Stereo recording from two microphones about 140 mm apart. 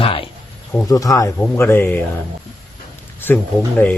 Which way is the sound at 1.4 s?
15° left (ahead or behind).